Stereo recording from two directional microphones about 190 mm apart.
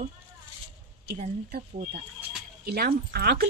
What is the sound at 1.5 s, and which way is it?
A woman's voice, 55° right (ahead or behind).